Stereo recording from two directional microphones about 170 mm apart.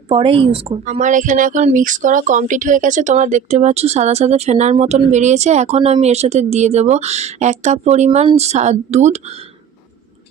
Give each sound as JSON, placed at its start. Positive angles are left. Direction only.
{"t": 0.1, "sound": "a woman's voice", "side_deg": -30}